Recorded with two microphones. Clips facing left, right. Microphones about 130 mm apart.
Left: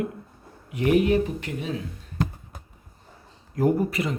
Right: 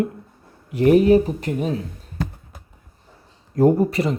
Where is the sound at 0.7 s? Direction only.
35° right (ahead or behind).